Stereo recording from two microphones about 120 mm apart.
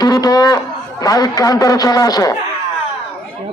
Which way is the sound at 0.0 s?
30° left (ahead or behind).